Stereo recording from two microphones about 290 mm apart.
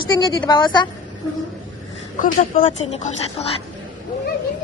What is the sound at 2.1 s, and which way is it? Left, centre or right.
Speech, left.